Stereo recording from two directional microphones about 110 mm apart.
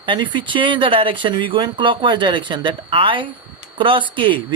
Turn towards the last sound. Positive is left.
turn(degrees=-50)  # may be behind; listen again after turning